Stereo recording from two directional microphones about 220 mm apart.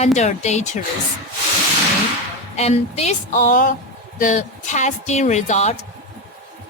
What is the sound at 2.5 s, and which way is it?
A woman's voice, 30° left (ahead or behind).